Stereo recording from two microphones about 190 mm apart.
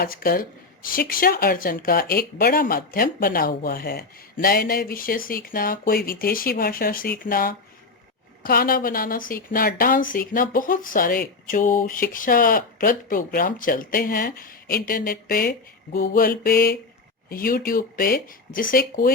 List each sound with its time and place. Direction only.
0.0 s speech: 50° left (ahead or behind)